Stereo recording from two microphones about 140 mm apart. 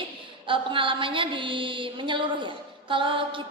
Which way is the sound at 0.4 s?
35° right (ahead or behind).